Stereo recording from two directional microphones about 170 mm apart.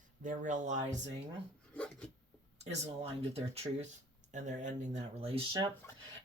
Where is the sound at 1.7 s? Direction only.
5° left (ahead or behind).